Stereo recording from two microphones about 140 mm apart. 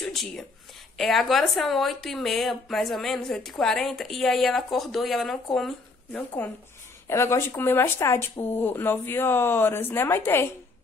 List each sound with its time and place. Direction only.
0.0 s speech: centre (ahead or behind)
6.1 s speech: 15° left (ahead or behind)